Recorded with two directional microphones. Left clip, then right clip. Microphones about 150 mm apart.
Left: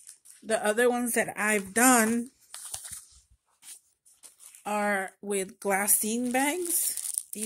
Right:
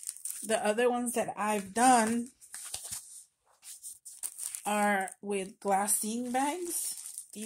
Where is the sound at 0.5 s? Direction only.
30° left (ahead or behind).